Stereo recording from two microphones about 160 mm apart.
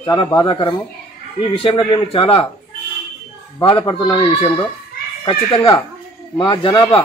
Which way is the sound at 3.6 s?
30° left (ahead or behind).